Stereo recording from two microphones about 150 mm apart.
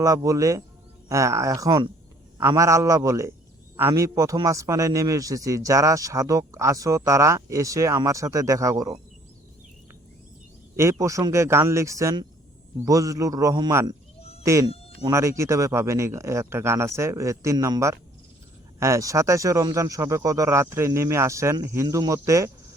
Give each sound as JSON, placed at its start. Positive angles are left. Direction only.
{"t": 0.0, "sound": "a man's voice", "side_deg": -20}
{"t": 11.0, "sound": "a man's voice", "side_deg": -20}
{"t": 14.2, "sound": "fowl", "side_deg": 40}
{"t": 14.4, "sound": "speech", "side_deg": -20}
{"t": 14.7, "sound": "insect", "side_deg": 40}
{"t": 15.1, "sound": "a man's voice", "side_deg": -20}